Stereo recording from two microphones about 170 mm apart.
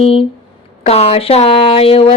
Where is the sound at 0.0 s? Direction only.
35° left (ahead or behind).